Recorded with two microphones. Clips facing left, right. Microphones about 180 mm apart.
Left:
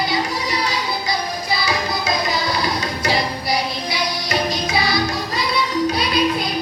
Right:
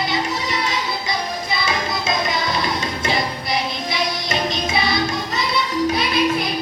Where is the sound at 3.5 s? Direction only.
25° right (ahead or behind).